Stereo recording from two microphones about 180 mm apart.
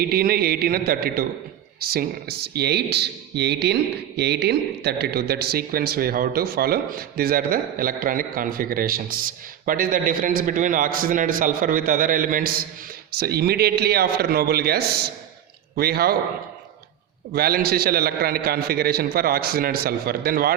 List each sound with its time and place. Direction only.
0.0 s a man's voice: 60° right (ahead or behind)
17.3 s a man's voice: 60° right (ahead or behind)